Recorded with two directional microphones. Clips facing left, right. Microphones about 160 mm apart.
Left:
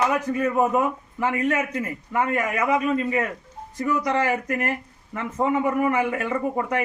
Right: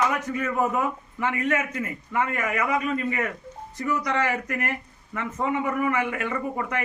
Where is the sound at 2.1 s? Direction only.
30° left (ahead or behind).